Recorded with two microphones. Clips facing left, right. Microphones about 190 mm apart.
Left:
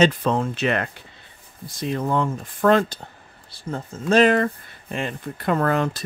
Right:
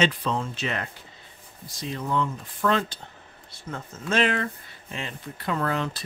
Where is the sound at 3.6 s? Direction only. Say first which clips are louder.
Left 7 dB; 35° left (ahead or behind).